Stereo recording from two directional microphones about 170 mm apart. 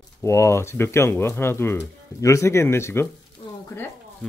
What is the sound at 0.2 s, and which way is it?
Speech, 15° left (ahead or behind).